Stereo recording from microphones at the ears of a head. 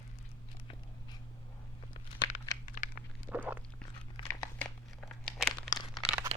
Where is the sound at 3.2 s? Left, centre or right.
Centre.